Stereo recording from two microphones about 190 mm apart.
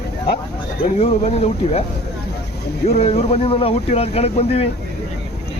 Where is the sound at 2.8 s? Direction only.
35° left (ahead or behind).